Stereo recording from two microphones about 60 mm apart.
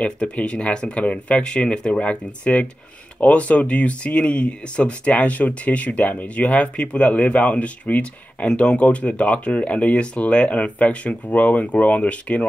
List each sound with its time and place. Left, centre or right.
0.0 s speech: centre